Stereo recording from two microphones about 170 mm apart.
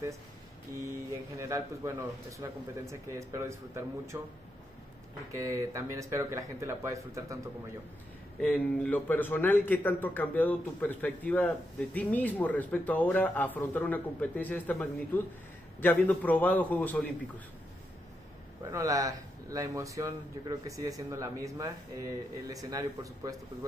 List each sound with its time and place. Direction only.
1.4 s a man's voice: 15° right (ahead or behind)
8.4 s speech: 5° left (ahead or behind)
18.7 s speech: 20° right (ahead or behind)